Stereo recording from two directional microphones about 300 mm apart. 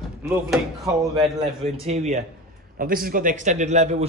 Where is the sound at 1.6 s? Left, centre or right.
Right.